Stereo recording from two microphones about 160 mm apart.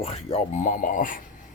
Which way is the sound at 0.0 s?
40° left (ahead or behind).